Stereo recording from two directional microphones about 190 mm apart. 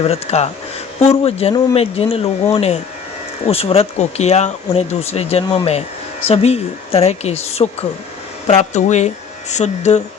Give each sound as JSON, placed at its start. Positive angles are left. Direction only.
{"t": 0.0, "sound": "speech", "side_deg": 35}